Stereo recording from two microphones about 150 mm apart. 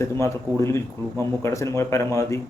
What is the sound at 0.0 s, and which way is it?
A man's voice, 20° left (ahead or behind).